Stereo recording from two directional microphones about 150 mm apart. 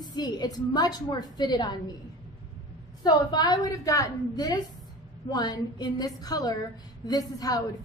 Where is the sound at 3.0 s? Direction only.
25° left (ahead or behind).